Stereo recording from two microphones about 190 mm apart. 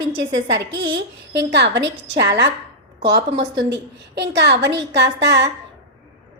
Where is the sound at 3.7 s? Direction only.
65° right (ahead or behind).